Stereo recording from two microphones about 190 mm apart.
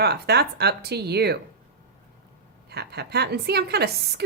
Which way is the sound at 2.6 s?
60° right (ahead or behind).